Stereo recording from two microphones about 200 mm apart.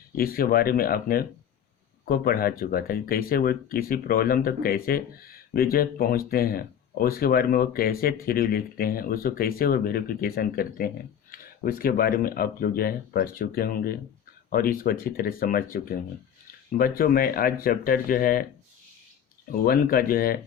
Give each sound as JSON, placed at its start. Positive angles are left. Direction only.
{"t": 0.2, "sound": "speech", "side_deg": 45}
{"t": 19.5, "sound": "speech", "side_deg": 45}